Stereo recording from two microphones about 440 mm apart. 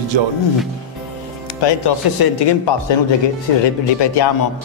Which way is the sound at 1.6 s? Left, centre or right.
Left.